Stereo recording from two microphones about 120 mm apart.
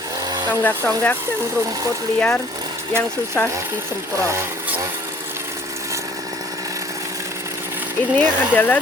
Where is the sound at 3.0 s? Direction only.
10° left (ahead or behind).